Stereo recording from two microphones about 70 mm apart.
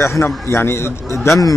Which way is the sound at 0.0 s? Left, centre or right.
Left.